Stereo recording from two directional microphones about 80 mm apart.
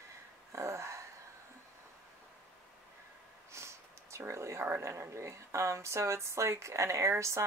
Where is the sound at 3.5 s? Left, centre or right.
Right.